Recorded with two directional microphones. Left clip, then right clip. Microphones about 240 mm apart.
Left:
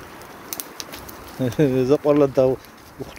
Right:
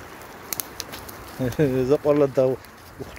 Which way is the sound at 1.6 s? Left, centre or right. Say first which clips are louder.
Left 2 dB; centre.